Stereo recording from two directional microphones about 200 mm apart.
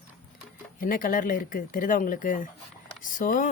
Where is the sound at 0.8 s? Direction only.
45° left (ahead or behind).